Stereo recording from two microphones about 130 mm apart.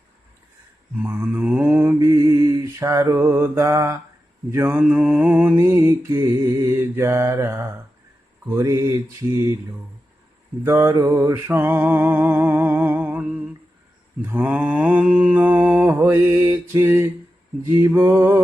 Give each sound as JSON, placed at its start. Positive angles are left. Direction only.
{"t": 1.0, "sound": "mantra", "side_deg": -15}
{"t": 10.6, "sound": "a sound", "side_deg": -20}
{"t": 14.2, "sound": "mantra", "side_deg": -15}